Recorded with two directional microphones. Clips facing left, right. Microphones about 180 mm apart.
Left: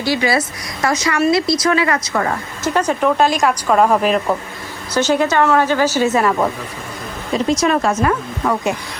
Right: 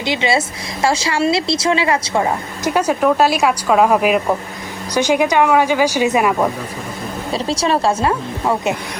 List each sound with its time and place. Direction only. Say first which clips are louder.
0.0 s speech: left 1 dB; 20° right (ahead or behind)
2.6 s speech: right 1 dB; 10° right (ahead or behind)
7.3 s speech: left 2 dB; 30° right (ahead or behind)